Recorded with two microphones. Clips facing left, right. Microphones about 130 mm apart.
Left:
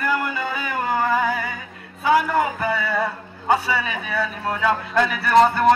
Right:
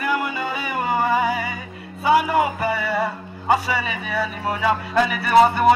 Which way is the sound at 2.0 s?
10° right (ahead or behind).